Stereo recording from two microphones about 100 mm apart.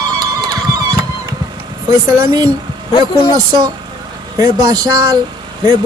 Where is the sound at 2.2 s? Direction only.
40° right (ahead or behind).